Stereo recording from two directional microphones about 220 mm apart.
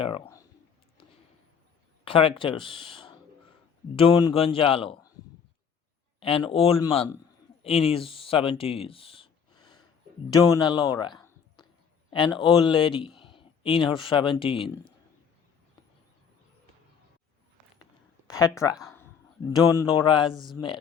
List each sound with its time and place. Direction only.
0.0 s a sound: 20° left (ahead or behind)
2.0 s a man's voice: 25° left (ahead or behind)
6.1 s a man's voice: 25° left (ahead or behind)
18.3 s speech: 15° left (ahead or behind)
20.3 s speech: centre (ahead or behind)